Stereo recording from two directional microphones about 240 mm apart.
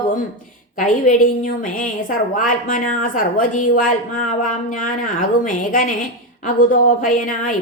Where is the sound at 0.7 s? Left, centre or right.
Left.